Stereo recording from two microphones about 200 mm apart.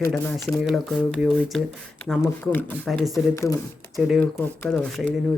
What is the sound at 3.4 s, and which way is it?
Rub, 15° left (ahead or behind).